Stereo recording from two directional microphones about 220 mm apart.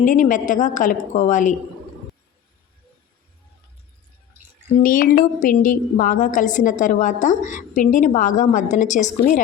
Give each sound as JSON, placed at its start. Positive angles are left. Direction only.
{"t": 0.0, "sound": "a woman's voice", "side_deg": 35}
{"t": 4.8, "sound": "a woman's voice", "side_deg": 40}